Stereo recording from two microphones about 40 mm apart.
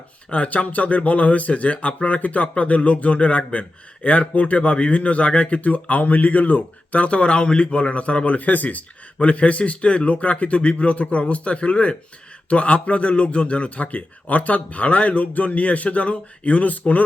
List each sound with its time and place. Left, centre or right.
0.3 s speech: left
9.2 s speech: left